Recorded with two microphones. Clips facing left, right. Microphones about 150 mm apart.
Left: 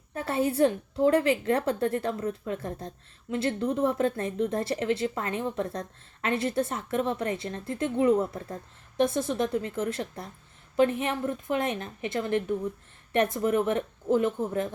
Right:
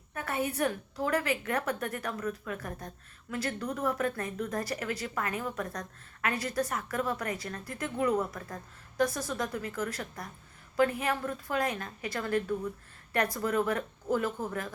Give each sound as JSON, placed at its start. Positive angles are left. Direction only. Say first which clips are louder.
{"t": 0.1, "sound": "a woman's voice", "louder": "left 6 dB", "side_deg": 30}